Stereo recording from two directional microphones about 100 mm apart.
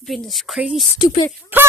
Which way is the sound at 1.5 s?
20° right (ahead or behind).